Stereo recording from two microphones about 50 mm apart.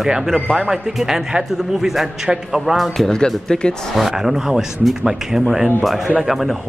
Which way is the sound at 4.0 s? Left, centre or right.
Centre.